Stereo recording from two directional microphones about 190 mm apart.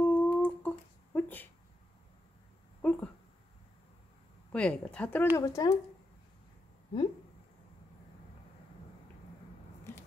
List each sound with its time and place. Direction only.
0.0 s humming: 10° left (ahead or behind)
2.8 s a sound: 5° left (ahead or behind)
4.5 s speech: 5° left (ahead or behind)